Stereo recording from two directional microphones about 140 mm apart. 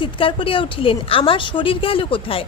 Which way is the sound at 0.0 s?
40° left (ahead or behind).